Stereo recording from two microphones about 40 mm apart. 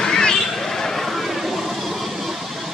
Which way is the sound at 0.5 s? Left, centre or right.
Centre.